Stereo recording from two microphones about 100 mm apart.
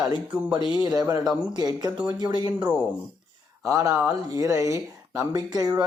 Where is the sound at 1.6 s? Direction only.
40° right (ahead or behind).